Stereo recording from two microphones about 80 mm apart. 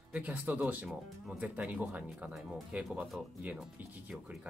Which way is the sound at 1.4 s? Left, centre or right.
Centre.